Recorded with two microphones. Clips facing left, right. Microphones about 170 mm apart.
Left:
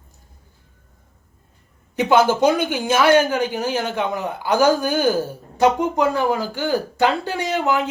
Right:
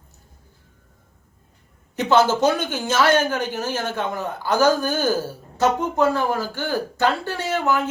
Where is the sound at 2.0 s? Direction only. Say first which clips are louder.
Left 2 dB; 10° left (ahead or behind).